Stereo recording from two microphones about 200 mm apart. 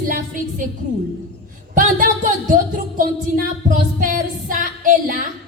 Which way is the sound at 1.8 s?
40° right (ahead or behind).